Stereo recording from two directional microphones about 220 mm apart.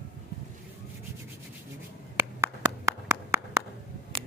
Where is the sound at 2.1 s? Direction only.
15° right (ahead or behind).